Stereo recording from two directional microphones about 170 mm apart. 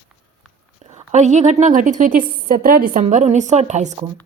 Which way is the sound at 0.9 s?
45° right (ahead or behind).